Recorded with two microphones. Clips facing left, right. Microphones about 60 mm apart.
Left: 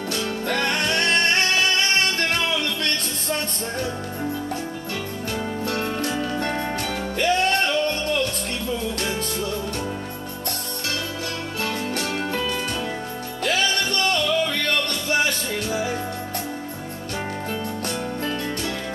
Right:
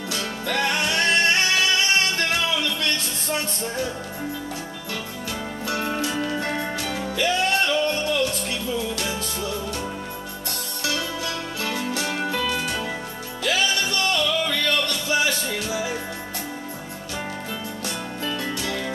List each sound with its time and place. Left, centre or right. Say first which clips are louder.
0.1 s music: left 1 dB; left
6.0 s music: even; centre
6.8 s music: left 1 dB; left
12.3 s music: even; left
17.8 s music: even; left